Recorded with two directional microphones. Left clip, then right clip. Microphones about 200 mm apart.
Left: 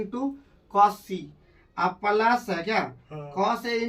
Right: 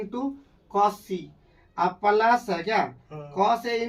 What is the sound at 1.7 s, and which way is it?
Speech, 5° right (ahead or behind).